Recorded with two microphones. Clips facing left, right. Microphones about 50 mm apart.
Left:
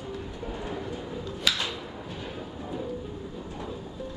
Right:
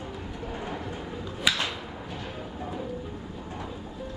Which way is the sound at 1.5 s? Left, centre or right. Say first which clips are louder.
Right 2 dB; centre.